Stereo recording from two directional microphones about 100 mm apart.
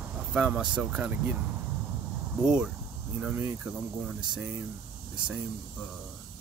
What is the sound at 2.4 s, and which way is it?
Speech, 10° right (ahead or behind).